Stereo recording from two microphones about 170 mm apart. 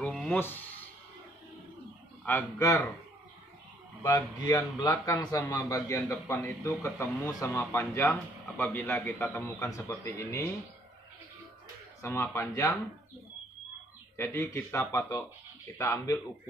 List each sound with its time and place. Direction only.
0.0 s a sound: 5° left (ahead or behind)
0.4 s a man's voice: 10° left (ahead or behind)
2.2 s a man's voice: 15° left (ahead or behind)
4.0 s a man's voice: 20° left (ahead or behind)
12.0 s a man's voice: 15° left (ahead or behind)
14.1 s a man's voice: 15° left (ahead or behind)